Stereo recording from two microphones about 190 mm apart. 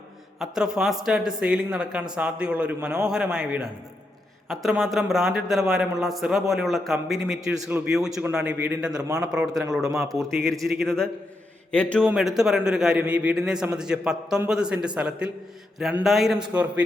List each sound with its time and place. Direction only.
0.3 s a man's voice: 5° right (ahead or behind)
10.2 s a man's voice: centre (ahead or behind)